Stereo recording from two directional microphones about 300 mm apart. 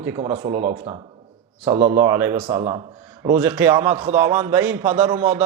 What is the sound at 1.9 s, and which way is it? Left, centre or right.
A man's voice, centre.